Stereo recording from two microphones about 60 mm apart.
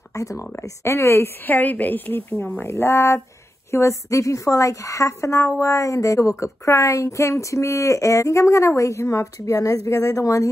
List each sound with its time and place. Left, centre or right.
0.1 s speech: left
0.6 s speech: left
1.4 s a woman's voice: left